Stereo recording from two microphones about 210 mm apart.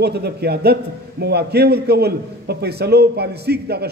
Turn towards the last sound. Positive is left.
turn(degrees=-50)  # may be behind; listen again after turning